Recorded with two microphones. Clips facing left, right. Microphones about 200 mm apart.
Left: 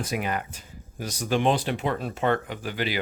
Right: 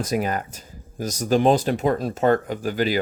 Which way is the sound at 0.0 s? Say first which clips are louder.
Right 5 dB; 40° right (ahead or behind).